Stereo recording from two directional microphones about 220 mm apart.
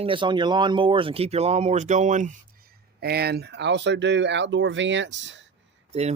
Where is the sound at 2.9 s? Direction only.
45° right (ahead or behind).